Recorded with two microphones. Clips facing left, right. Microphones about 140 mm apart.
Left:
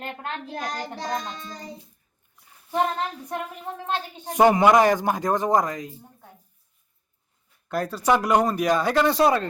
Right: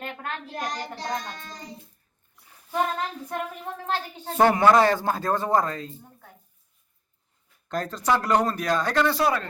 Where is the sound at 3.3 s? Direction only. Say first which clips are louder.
Even; 15° left (ahead or behind).